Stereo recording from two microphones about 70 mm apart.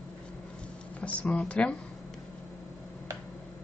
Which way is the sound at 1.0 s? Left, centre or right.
Centre.